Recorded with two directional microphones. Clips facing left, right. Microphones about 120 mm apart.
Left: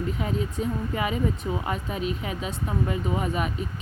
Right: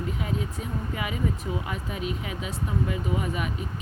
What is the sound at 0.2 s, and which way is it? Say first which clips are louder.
Speech: left 3 dB; 35° left (ahead or behind).